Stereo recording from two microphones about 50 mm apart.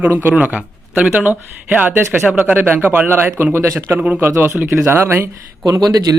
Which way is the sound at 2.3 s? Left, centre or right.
Right.